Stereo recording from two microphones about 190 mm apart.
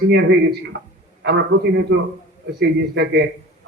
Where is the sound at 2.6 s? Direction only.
60° right (ahead or behind).